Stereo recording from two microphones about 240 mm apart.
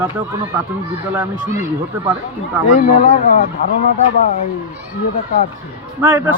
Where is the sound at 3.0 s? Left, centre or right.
Left.